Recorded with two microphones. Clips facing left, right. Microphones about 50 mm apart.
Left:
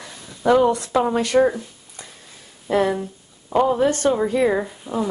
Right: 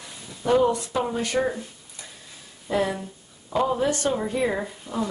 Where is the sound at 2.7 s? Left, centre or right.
Left.